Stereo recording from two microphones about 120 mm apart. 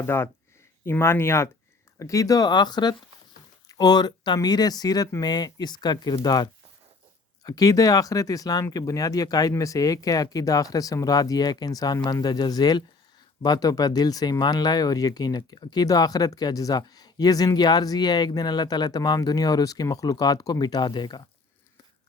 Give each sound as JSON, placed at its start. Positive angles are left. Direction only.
{"t": 0.0, "sound": "speech", "side_deg": 20}